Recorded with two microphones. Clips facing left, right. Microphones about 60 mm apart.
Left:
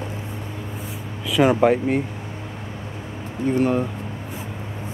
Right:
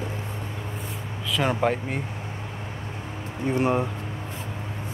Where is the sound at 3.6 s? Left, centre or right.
Centre.